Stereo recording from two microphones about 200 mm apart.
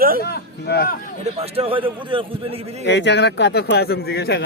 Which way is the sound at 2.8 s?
60° left (ahead or behind).